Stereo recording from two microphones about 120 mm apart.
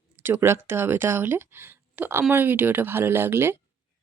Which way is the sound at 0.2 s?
20° right (ahead or behind).